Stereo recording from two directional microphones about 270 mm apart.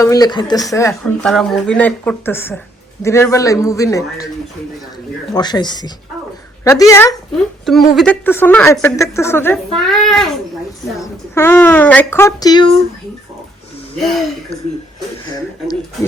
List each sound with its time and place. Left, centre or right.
0.0 s a woman's voice: centre
5.3 s a woman's voice: centre
7.6 s a woman's voice: centre